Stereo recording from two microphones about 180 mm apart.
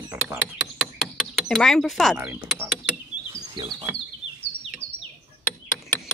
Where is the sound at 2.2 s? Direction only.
15° right (ahead or behind).